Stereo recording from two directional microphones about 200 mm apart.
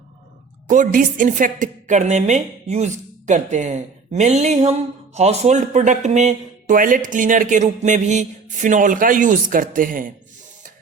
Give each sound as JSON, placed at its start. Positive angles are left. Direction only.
{"t": 0.7, "sound": "speech", "side_deg": -40}